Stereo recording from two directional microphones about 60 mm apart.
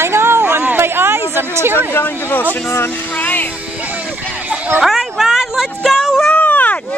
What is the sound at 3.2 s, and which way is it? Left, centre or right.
Music, left.